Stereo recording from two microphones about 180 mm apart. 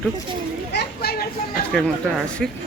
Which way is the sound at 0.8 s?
60° left (ahead or behind).